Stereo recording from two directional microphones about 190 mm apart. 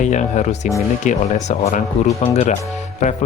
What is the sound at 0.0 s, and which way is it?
Speech, 40° left (ahead or behind).